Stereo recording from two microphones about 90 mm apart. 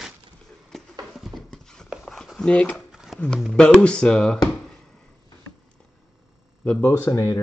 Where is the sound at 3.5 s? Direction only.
10° left (ahead or behind).